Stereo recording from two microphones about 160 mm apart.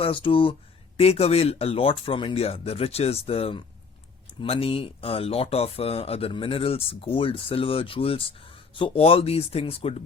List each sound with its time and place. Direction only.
0.0 s speech: 35° left (ahead or behind)